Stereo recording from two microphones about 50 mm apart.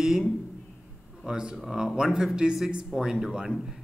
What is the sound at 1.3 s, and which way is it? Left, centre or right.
Speech, centre.